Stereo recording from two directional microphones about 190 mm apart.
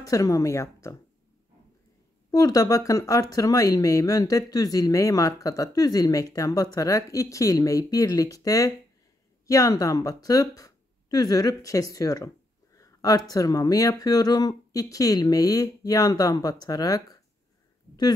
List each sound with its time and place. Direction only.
0.0 s speech: 15° left (ahead or behind)
2.3 s speech: 20° left (ahead or behind)